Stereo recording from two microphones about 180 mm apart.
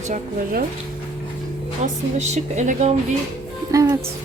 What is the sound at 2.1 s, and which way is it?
Speech, 40° right (ahead or behind).